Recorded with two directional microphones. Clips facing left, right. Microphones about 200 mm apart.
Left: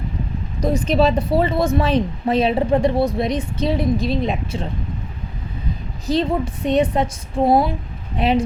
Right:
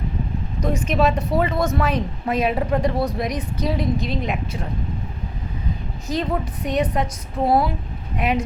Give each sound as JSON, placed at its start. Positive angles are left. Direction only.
{"t": 0.6, "sound": "speech", "side_deg": 35}
{"t": 6.1, "sound": "speech", "side_deg": 30}